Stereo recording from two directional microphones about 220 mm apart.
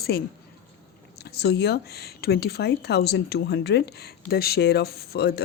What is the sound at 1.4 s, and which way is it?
Speech, 50° left (ahead or behind).